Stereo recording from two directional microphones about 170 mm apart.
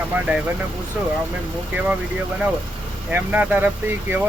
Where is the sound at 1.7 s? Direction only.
10° right (ahead or behind).